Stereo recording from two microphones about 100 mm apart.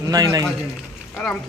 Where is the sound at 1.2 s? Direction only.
10° left (ahead or behind).